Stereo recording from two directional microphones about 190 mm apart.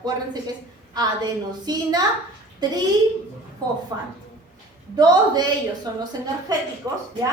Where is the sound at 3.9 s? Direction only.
20° right (ahead or behind).